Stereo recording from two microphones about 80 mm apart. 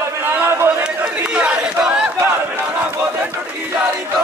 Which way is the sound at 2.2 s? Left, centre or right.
Right.